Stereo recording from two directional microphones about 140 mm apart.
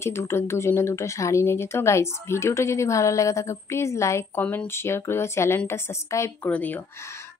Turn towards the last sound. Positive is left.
turn(degrees=20)  # may be behind; listen again after turning